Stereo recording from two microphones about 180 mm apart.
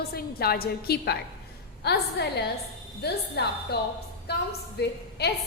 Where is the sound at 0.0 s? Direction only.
60° left (ahead or behind).